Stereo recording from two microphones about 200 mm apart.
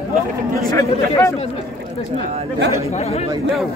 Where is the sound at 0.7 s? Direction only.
15° left (ahead or behind).